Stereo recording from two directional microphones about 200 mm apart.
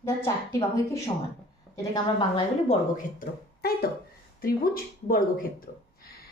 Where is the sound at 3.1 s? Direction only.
50° left (ahead or behind).